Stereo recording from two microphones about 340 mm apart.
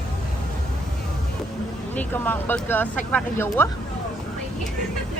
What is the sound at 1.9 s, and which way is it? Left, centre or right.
Speech, centre.